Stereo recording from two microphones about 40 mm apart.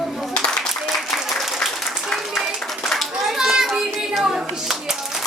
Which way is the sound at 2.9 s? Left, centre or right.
Centre.